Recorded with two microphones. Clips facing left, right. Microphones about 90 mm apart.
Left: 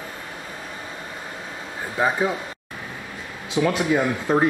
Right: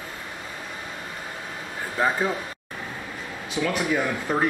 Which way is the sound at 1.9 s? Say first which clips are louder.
Left 2 dB; 15° left (ahead or behind).